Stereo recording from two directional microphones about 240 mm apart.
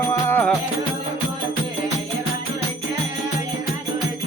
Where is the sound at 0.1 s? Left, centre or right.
Centre.